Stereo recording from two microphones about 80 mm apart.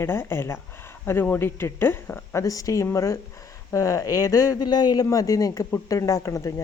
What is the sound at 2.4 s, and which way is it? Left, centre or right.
Speech, left.